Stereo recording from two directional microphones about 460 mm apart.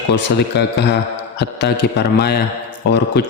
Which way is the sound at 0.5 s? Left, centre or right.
Left.